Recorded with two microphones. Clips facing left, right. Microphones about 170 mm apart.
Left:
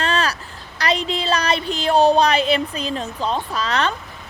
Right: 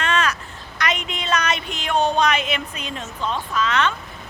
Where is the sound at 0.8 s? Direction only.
35° left (ahead or behind).